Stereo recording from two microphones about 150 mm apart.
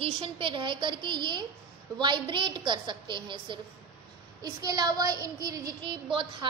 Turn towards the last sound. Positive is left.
turn(degrees=-35)  # may be behind; listen again after turning